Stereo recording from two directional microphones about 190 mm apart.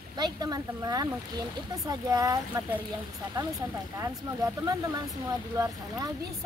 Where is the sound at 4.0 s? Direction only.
20° right (ahead or behind).